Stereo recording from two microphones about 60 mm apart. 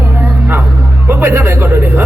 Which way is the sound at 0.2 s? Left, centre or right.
Right.